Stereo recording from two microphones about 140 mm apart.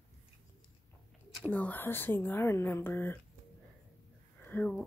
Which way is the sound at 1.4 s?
10° left (ahead or behind).